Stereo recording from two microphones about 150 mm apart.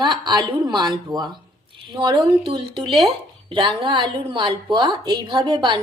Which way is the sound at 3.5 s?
35° right (ahead or behind).